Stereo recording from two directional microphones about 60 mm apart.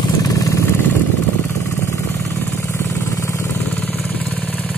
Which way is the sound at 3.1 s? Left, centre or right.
Left.